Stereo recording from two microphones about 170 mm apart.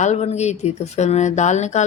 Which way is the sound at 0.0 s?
40° left (ahead or behind).